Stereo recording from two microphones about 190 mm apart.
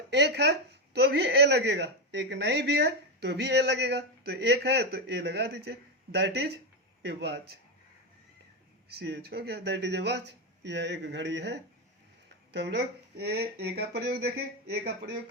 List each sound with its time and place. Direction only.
0.1 s speech: 60° right (ahead or behind)
8.9 s speech: 55° right (ahead or behind)